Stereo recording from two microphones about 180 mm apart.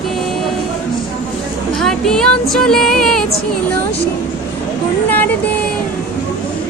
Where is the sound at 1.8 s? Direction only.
Centre (ahead or behind).